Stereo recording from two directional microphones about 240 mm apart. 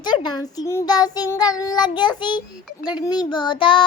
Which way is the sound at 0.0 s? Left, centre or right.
Centre.